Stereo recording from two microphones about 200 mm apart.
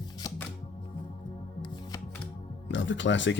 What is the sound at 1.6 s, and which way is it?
Shuffling cards, 20° left (ahead or behind).